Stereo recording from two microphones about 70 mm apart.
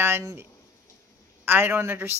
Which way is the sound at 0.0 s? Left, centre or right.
Right.